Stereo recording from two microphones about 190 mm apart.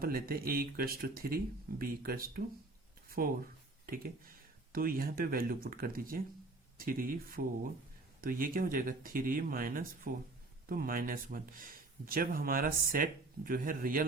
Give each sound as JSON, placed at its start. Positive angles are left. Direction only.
{"t": 0.0, "sound": "speech", "side_deg": -55}
{"t": 3.8, "sound": "speech", "side_deg": -50}